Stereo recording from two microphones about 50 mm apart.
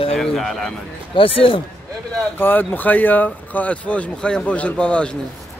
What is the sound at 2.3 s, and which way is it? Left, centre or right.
A man's voice, left.